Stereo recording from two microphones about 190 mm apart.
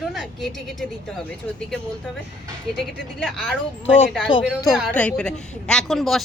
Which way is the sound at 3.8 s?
90° left.